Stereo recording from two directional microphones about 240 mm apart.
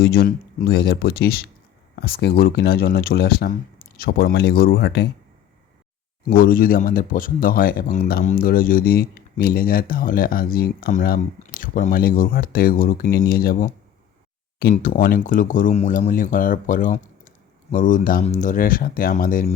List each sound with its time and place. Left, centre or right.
0.0 s speech: left
6.2 s speech: left